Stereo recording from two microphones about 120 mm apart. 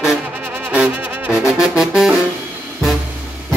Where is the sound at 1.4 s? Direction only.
5° right (ahead or behind).